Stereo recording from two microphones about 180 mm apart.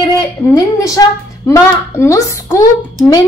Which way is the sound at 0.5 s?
20° left (ahead or behind).